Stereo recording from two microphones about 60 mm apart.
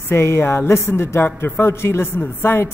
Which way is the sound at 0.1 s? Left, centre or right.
Left.